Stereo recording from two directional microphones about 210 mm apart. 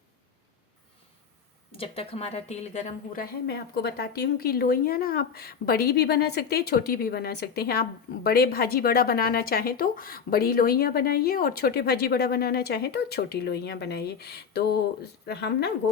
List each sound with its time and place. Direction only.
1.7 s speech: 25° left (ahead or behind)
3.4 s a woman's voice: 50° left (ahead or behind)